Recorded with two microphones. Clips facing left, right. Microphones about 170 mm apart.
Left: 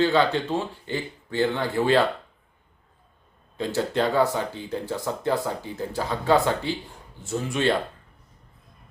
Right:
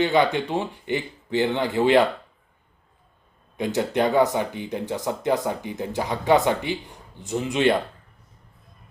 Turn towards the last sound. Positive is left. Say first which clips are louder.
# right 3 dB
turn(degrees=-20)  # may be behind; listen again after turning